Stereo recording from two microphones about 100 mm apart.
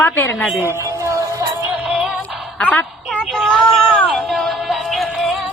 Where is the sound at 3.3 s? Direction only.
Centre (ahead or behind).